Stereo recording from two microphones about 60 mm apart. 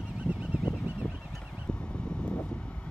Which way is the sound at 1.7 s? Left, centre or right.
Centre.